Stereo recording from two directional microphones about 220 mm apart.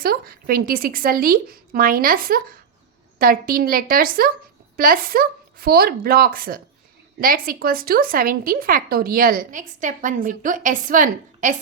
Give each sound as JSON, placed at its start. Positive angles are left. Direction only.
{"t": 0.0, "sound": "a woman's voice", "side_deg": -40}